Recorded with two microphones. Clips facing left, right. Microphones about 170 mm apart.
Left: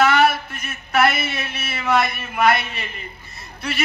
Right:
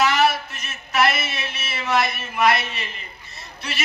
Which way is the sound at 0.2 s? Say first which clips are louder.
Left 2 dB; 55° left (ahead or behind).